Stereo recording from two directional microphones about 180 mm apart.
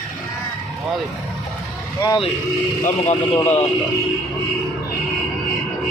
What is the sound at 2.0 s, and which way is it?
Speech, 25° left (ahead or behind).